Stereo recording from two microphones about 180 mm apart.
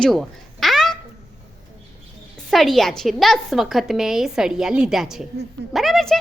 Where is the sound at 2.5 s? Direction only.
Centre (ahead or behind).